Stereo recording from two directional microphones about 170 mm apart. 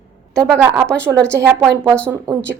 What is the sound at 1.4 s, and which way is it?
A woman's voice, 5° right (ahead or behind).